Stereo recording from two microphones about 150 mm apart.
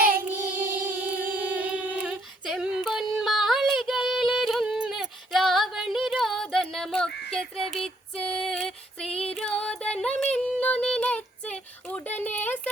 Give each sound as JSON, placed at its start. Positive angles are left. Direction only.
{"t": 0.0, "sound": "child singing", "side_deg": -70}
{"t": 1.2, "sound": "singing", "side_deg": -10}
{"t": 7.3, "sound": "child singing", "side_deg": 5}
{"t": 7.7, "sound": "female singing", "side_deg": 5}
{"t": 9.3, "sound": "music", "side_deg": 5}